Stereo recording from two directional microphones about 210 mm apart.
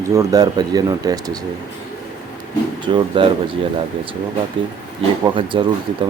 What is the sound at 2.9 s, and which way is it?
Speech, 25° right (ahead or behind).